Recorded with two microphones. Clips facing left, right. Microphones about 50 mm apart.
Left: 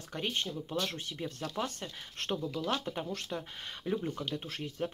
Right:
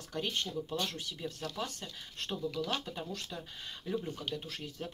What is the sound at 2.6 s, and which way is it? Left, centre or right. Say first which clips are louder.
Speech: left 3 dB; left.